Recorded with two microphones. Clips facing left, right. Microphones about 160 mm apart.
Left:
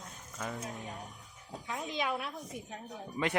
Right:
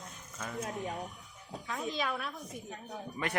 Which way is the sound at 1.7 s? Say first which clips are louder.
Even; 20° left (ahead or behind).